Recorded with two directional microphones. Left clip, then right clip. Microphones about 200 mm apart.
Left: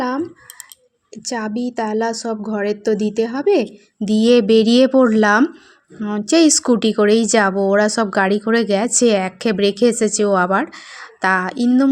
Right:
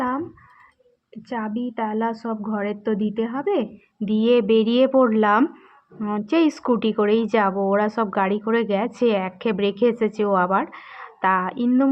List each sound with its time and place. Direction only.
1.1 s a woman's voice: 25° left (ahead or behind)
4.1 s speech: 35° left (ahead or behind)